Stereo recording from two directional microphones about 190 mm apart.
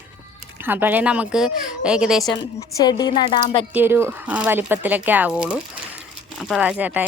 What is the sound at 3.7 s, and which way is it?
Speech, 10° right (ahead or behind).